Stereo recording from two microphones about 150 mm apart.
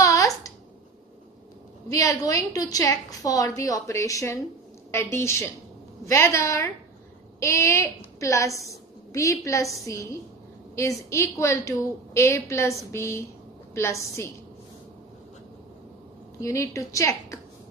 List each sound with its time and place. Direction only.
0.0 s a sound: 20° left (ahead or behind)
1.9 s a woman's voice: 20° left (ahead or behind)
11.1 s a woman's voice: 20° left (ahead or behind)
16.3 s a woman's voice: 20° left (ahead or behind)